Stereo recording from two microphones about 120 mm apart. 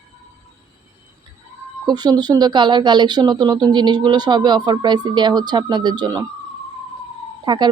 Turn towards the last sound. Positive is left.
turn(degrees=-40)  # may be behind; listen again after turning